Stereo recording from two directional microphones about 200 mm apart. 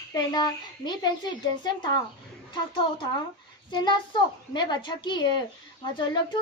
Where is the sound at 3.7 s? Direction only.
25° left (ahead or behind).